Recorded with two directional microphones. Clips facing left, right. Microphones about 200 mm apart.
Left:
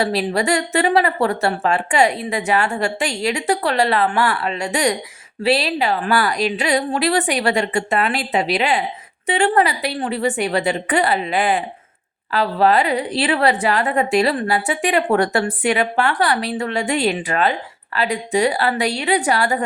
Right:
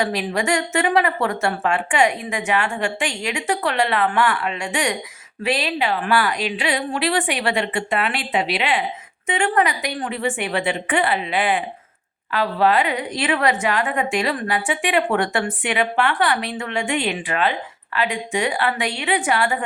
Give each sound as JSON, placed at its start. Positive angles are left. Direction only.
{"t": 0.0, "sound": "a woman's voice", "side_deg": 35}